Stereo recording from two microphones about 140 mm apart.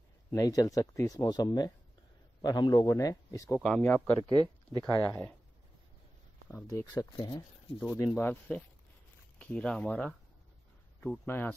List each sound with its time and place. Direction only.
0.3 s speech: 25° left (ahead or behind)
3.6 s speech: 10° left (ahead or behind)
4.2 s speech: 35° right (ahead or behind)
4.9 s speech: 20° left (ahead or behind)
6.9 s speech: 25° left (ahead or behind)
8.1 s speech: 10° left (ahead or behind)